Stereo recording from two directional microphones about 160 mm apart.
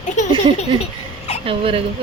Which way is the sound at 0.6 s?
40° left (ahead or behind).